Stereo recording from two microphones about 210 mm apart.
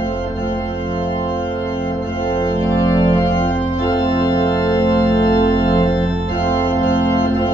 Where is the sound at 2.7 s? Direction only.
20° left (ahead or behind).